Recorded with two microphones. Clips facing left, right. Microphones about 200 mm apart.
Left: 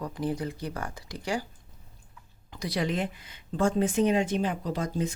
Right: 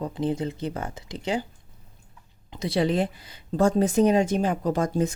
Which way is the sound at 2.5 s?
25° right (ahead or behind).